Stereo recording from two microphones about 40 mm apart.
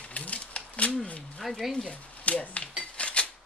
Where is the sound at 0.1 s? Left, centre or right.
Left.